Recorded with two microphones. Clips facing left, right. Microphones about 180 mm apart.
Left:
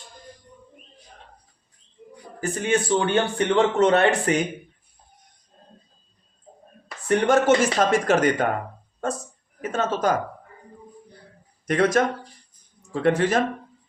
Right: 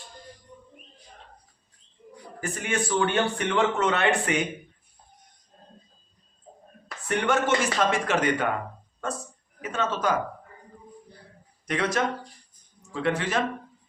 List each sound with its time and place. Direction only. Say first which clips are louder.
2.4 s a man's voice: left 6 dB; 35° left (ahead or behind)
7.1 s speech: left 6 dB; 40° left (ahead or behind)
9.6 s speech: left 4 dB; 45° left (ahead or behind)
11.6 s speech: left 6 dB; 45° left (ahead or behind)